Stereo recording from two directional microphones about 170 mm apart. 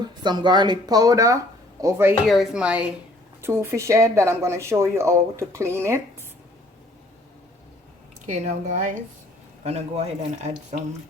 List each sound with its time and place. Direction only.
0.0 s speech: 25° right (ahead or behind)
2.2 s speech: centre (ahead or behind)
8.3 s speech: 45° right (ahead or behind)